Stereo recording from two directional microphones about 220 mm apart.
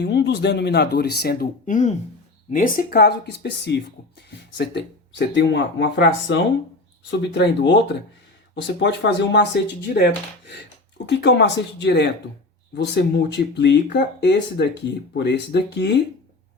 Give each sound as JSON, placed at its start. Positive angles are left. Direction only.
{"t": 0.0, "sound": "speech", "side_deg": 50}